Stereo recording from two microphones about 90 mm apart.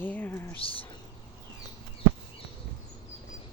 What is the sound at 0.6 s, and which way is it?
Speech, 90° left.